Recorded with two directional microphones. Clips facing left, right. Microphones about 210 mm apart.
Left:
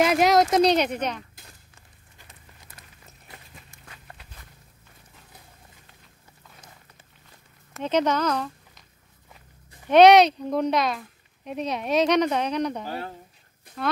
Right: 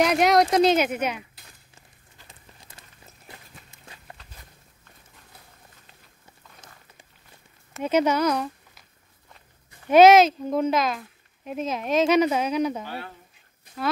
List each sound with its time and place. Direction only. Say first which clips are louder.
0.0 s speech: even; centre (ahead or behind)
7.8 s speech: right 2 dB; 10° right (ahead or behind)
9.8 s speech: even; 5° right (ahead or behind)
12.8 s speech: left 3 dB; 40° left (ahead or behind)